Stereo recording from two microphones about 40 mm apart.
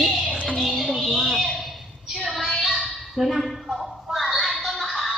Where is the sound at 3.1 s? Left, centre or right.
Centre.